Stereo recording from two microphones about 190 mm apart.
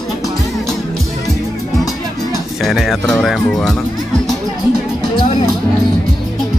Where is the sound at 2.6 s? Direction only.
Centre (ahead or behind).